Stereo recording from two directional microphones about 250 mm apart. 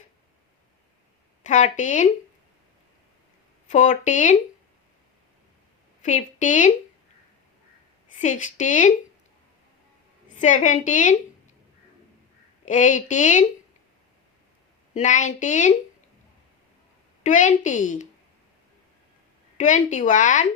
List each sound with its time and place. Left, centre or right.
1.5 s speech: left
3.7 s speech: left
6.0 s a woman's voice: left
8.2 s speech: left
10.2 s speech: left
12.6 s speech: left
14.9 s speech: left
17.2 s speech: left
19.5 s speech: left